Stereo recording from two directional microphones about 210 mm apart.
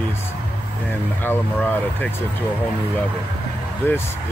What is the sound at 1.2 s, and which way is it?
Speech, 10° left (ahead or behind).